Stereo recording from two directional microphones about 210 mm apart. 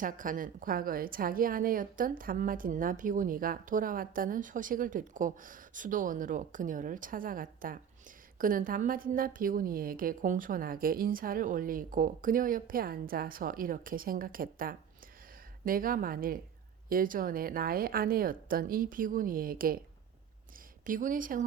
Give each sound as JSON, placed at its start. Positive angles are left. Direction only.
{"t": 0.0, "sound": "a woman's voice", "side_deg": -40}
{"t": 20.8, "sound": "a woman's voice", "side_deg": -40}